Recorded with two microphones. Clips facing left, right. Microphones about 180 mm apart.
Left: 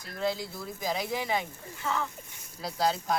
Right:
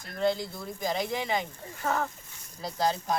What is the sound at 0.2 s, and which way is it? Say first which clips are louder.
Speech: right 3 dB; centre (ahead or behind).